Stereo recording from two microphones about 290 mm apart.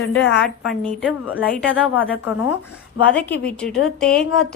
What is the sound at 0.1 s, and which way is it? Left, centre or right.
Speech, left.